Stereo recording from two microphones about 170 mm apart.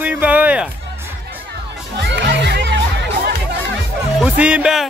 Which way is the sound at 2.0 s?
80° right.